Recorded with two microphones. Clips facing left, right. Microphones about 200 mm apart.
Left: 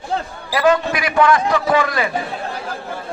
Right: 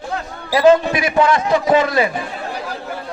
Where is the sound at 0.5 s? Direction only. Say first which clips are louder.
Right 4 dB; 25° right (ahead or behind).